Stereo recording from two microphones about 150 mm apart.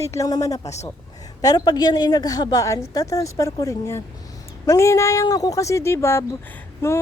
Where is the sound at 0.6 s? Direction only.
45° left (ahead or behind).